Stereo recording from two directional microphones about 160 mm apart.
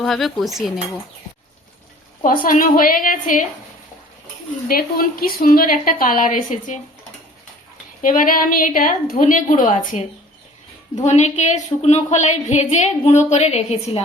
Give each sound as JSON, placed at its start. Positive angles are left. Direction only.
{"t": 0.0, "sound": "cutlery", "side_deg": 0}
{"t": 2.2, "sound": "a woman's voice", "side_deg": 60}
{"t": 4.7, "sound": "a woman's voice", "side_deg": 65}
{"t": 8.0, "sound": "a woman's voice", "side_deg": 55}